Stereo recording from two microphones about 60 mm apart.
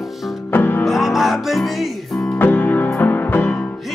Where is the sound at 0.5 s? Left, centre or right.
Left.